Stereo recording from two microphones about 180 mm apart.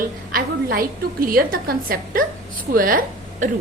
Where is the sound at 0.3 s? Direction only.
55° right (ahead or behind).